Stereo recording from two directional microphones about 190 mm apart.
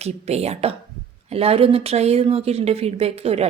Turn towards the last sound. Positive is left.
turn(degrees=-30)  # may be behind; listen again after turning